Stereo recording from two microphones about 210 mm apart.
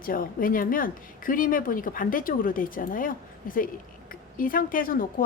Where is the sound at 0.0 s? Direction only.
40° left (ahead or behind).